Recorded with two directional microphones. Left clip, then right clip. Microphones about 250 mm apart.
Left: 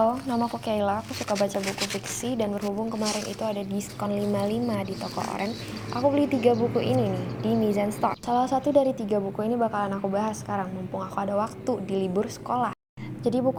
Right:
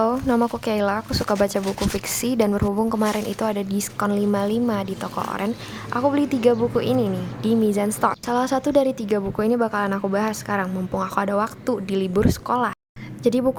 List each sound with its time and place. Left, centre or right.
0.0 s a woman's voice: right
2.2 s a woman's voice: right
2.6 s a woman's voice: right
9.5 s a woman's voice: right
10.2 s a woman's voice: right
10.6 s a woman's voice: right
11.1 s a woman's voice: right
13.2 s a woman's voice: right